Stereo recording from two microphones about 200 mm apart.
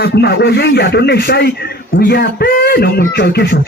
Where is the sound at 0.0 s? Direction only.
55° left (ahead or behind).